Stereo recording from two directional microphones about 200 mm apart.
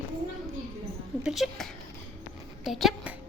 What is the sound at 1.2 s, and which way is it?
A woman's voice, centre (ahead or behind).